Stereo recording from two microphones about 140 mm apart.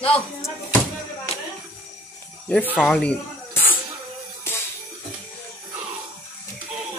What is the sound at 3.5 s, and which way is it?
Music, 15° left (ahead or behind).